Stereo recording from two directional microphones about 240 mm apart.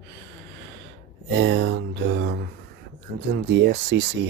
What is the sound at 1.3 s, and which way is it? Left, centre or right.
Speech, right.